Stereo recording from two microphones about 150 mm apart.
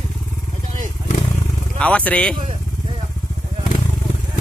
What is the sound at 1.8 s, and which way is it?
Speech, 10° left (ahead or behind).